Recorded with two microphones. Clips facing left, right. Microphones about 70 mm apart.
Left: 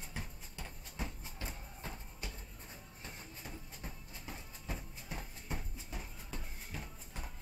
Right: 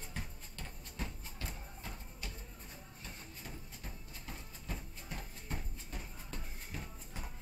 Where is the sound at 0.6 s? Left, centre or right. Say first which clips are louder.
Left 1 dB; centre.